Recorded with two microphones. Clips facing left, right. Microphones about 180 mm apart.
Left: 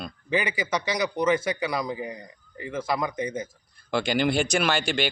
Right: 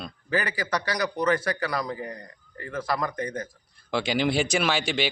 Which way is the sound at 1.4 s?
20° left (ahead or behind).